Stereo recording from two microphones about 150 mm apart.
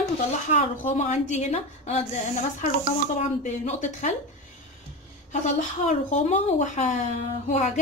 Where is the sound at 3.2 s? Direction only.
50° left (ahead or behind).